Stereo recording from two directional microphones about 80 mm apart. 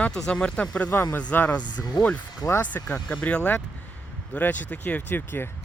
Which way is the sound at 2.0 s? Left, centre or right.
Left.